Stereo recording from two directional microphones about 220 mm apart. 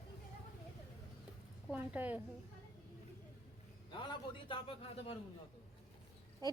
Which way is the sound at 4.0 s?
20° left (ahead or behind).